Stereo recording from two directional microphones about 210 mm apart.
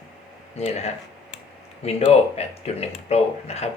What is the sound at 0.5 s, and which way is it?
Speech, 30° left (ahead or behind).